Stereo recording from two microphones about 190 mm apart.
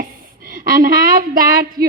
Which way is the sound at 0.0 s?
50° right (ahead or behind).